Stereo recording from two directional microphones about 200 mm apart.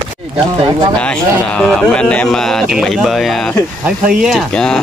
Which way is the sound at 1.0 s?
5° left (ahead or behind).